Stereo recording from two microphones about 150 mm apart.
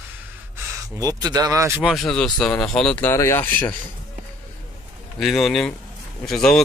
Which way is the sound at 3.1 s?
15° left (ahead or behind).